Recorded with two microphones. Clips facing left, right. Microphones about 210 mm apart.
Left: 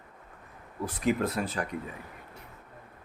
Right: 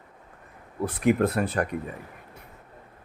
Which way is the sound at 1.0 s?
60° right (ahead or behind).